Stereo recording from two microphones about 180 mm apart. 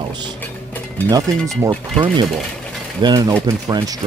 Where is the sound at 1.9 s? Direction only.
25° right (ahead or behind).